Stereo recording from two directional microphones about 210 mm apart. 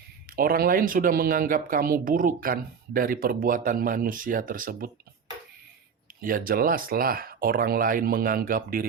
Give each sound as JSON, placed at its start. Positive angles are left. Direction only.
{"t": 0.3, "sound": "speech", "side_deg": -45}
{"t": 6.2, "sound": "speech", "side_deg": -45}